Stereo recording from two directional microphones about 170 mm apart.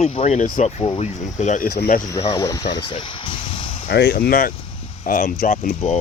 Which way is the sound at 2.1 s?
25° left (ahead or behind).